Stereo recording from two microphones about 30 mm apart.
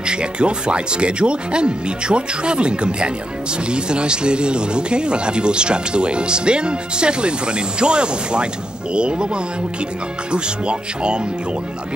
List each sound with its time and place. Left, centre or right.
0.0 s speech: right